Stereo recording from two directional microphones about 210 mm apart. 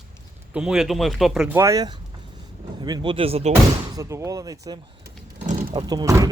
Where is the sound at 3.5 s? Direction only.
15° right (ahead or behind).